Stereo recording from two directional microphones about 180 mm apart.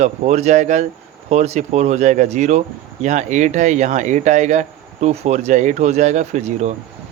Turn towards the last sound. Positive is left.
turn(degrees=-40)  # may be behind; listen again after turning